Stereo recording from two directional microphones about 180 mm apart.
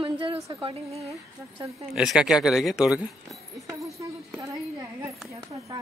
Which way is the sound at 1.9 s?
5° right (ahead or behind).